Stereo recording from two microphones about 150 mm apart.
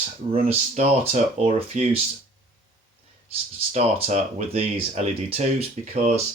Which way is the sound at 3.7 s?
50° right (ahead or behind).